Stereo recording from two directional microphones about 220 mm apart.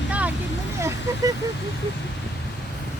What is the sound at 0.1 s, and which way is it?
Vehicle, 5° right (ahead or behind).